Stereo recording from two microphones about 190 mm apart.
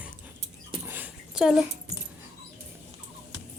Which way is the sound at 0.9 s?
5° right (ahead or behind).